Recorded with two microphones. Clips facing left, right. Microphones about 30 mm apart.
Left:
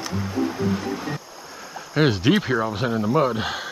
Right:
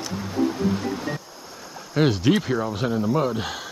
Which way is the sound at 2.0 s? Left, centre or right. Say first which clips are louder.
Left 1 dB; centre.